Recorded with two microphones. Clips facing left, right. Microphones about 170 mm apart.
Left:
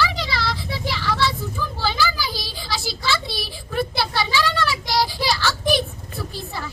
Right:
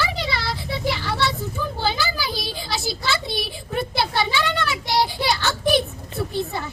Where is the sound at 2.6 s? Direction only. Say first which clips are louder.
Right 1 dB; 25° right (ahead or behind).